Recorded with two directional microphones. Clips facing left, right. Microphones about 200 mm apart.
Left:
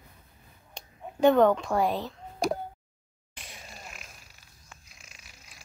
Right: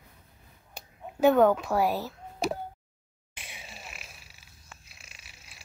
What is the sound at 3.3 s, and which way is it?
Grunt, 5° right (ahead or behind).